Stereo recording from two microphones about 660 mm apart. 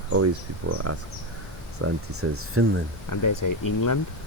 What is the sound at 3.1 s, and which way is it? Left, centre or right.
Speech, left.